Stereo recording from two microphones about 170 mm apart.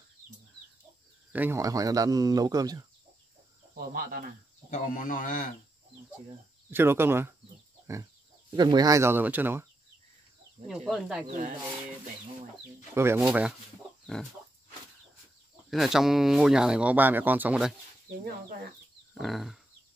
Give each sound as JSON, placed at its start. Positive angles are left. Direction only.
{"t": 1.3, "sound": "speech", "side_deg": -15}
{"t": 3.7, "sound": "cricket", "side_deg": -60}
{"t": 4.6, "sound": "speech", "side_deg": 50}
{"t": 6.7, "sound": "speech", "side_deg": -15}
{"t": 7.8, "sound": "a sound", "side_deg": -20}
{"t": 8.5, "sound": "speech", "side_deg": -25}
{"t": 10.7, "sound": "speech", "side_deg": 0}
{"t": 11.2, "sound": "speech", "side_deg": -50}
{"t": 12.9, "sound": "speech", "side_deg": -15}
{"t": 15.7, "sound": "speech", "side_deg": 0}
{"t": 19.1, "sound": "speech", "side_deg": 0}